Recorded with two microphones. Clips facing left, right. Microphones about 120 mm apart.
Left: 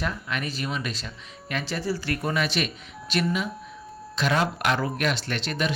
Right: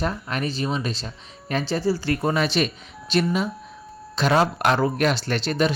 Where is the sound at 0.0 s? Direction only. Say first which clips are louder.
Right 4 dB; 35° right (ahead or behind).